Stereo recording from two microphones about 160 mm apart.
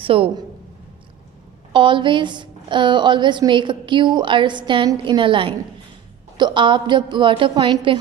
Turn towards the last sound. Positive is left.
turn(degrees=-30)  # may be behind; listen again after turning